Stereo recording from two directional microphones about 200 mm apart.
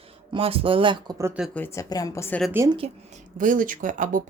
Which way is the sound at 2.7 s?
35° right (ahead or behind).